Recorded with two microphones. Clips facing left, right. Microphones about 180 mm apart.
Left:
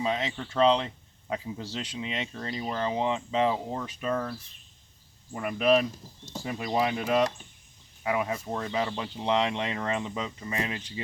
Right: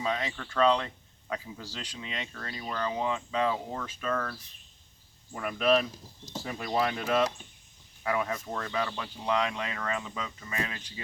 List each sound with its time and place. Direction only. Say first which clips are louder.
0.0 s speech: left 3 dB; 20° left (ahead or behind)
5.3 s speech: left 2 dB; 5° left (ahead or behind); by 11.0 s 20° left (ahead or behind)